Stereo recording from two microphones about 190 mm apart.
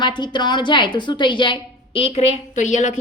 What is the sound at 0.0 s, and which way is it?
A woman's voice, 25° left (ahead or behind).